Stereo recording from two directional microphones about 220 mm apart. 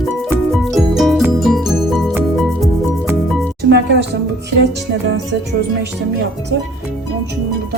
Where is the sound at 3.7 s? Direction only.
50° right (ahead or behind).